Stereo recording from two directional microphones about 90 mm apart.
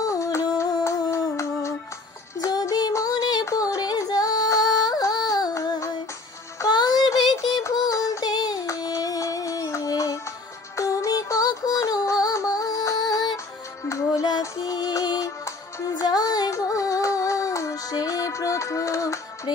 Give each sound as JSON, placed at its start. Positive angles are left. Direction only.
{"t": 0.0, "sound": "music", "side_deg": 35}
{"t": 2.4, "sound": "music", "side_deg": 45}
{"t": 3.4, "sound": "female singing", "side_deg": 40}
{"t": 5.0, "sound": "music", "side_deg": 45}
{"t": 6.7, "sound": "music", "side_deg": 50}
{"t": 13.8, "sound": "music", "side_deg": 35}
{"t": 14.6, "sound": "music", "side_deg": 50}